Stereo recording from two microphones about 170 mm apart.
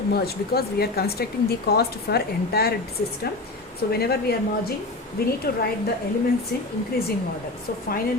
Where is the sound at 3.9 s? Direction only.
65° left (ahead or behind).